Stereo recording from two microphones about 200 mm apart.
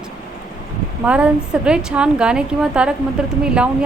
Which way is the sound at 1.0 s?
5° right (ahead or behind).